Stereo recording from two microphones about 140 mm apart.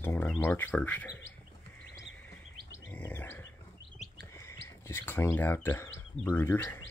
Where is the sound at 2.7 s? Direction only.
15° left (ahead or behind).